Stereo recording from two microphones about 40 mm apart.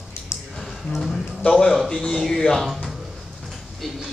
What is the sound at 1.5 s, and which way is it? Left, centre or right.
A man's voice, centre.